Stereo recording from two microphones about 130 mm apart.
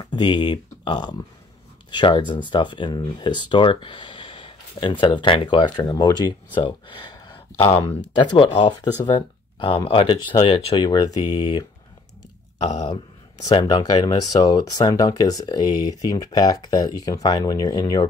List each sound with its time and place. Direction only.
0.0 s speech: 35° left (ahead or behind)
5.8 s speech: 25° left (ahead or behind)
12.8 s speech: 35° left (ahead or behind)